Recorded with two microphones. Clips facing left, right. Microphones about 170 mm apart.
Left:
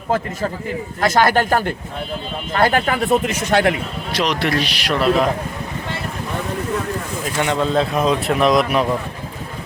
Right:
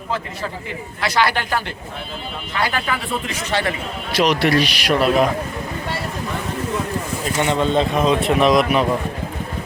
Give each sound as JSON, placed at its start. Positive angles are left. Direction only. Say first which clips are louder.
{"t": 1.0, "sound": "speech", "louder": "left 4 dB", "side_deg": 45}
{"t": 4.1, "sound": "speech", "louder": "right 3 dB", "side_deg": -5}
{"t": 7.3, "sound": "speech", "louder": "even", "side_deg": 0}